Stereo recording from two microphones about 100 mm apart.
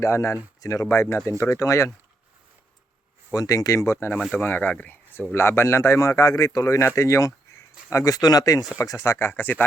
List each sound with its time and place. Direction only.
0.0 s speech: 30° left (ahead or behind)
3.3 s speech: 35° left (ahead or behind); by 9.6 s 20° left (ahead or behind)